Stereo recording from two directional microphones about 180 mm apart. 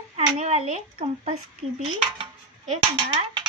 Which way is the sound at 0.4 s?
40° right (ahead or behind).